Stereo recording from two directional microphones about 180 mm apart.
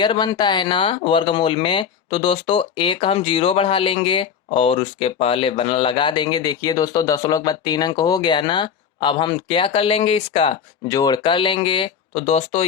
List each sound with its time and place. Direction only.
0.0 s speech: 25° left (ahead or behind)
10.8 s speech: 20° left (ahead or behind); by 12.6 s 35° left (ahead or behind)